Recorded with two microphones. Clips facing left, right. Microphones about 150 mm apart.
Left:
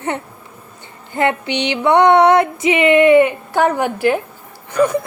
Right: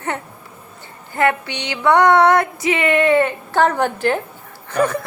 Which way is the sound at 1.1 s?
20° left (ahead or behind).